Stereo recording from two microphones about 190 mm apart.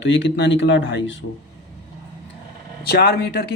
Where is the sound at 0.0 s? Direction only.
70° left (ahead or behind).